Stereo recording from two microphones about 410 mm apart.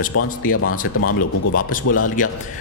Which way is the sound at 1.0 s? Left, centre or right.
Left.